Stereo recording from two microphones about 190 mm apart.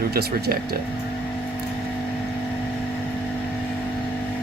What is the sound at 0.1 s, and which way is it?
Speech, 55° right (ahead or behind).